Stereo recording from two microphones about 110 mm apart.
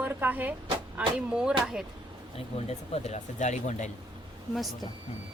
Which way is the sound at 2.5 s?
70° left (ahead or behind).